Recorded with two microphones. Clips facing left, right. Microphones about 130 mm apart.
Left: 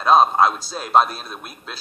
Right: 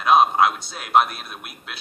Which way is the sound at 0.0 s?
30° left (ahead or behind).